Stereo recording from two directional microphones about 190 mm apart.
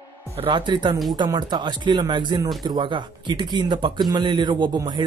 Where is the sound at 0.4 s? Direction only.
25° right (ahead or behind).